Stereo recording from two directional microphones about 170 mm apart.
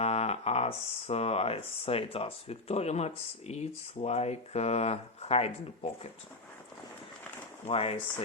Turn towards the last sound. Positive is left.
turn(degrees=35)  # may be behind; listen again after turning